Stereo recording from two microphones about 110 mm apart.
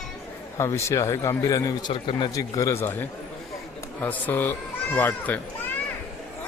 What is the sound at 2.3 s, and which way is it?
Speech, 30° left (ahead or behind).